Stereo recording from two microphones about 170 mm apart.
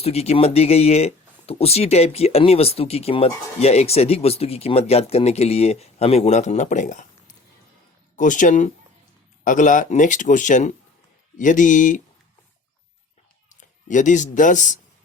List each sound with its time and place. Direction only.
0.0 s speech: 40° left (ahead or behind)
13.5 s speech: 45° left (ahead or behind)